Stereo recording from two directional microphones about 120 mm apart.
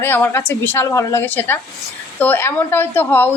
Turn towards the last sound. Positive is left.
turn(degrees=15)  # may be behind; listen again after turning